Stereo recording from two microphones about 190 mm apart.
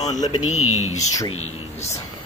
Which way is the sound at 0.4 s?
90° left.